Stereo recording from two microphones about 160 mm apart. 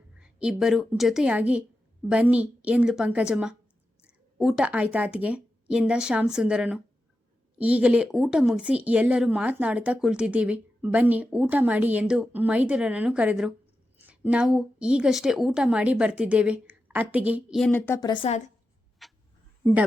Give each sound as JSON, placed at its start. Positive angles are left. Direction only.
{"t": 0.2, "sound": "speech", "side_deg": -5}
{"t": 17.6, "sound": "speech", "side_deg": 10}
{"t": 18.0, "sound": "a woman's voice", "side_deg": 30}
{"t": 18.3, "sound": "a woman's voice", "side_deg": 45}
{"t": 19.0, "sound": "a sound", "side_deg": 0}